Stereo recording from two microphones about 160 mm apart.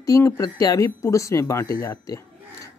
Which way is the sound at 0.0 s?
20° left (ahead or behind).